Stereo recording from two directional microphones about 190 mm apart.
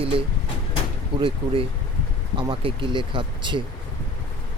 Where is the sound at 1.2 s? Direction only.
25° right (ahead or behind).